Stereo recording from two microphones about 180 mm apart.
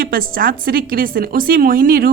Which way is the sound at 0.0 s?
55° right (ahead or behind).